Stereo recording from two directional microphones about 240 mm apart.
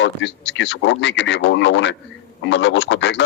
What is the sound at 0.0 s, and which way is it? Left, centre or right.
A man's voice, left.